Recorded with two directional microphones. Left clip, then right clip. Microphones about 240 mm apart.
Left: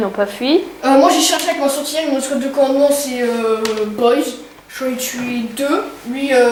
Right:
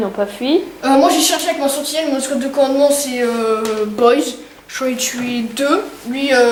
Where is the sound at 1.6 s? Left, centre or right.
Centre.